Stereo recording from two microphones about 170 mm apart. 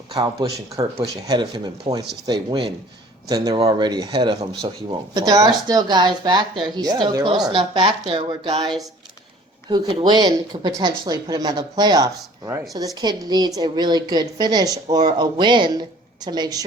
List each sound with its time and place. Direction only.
0.1 s speech: 25° right (ahead or behind)
9.6 s speech: 25° right (ahead or behind)